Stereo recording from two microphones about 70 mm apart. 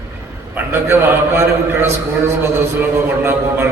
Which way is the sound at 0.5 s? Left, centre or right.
Right.